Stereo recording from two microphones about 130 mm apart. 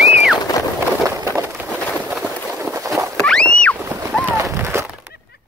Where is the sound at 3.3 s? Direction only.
10° left (ahead or behind).